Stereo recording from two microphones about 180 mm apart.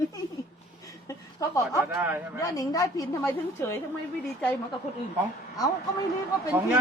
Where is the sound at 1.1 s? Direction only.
15° left (ahead or behind).